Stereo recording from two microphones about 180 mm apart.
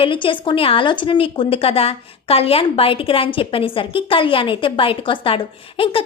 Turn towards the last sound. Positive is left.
turn(degrees=30)  # may be behind; listen again after turning